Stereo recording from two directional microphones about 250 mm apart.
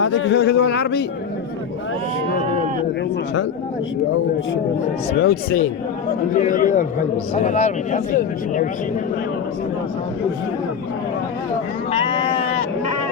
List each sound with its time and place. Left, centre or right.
0.0 s speech: left
5.2 s speech: left
11.9 s sheep: left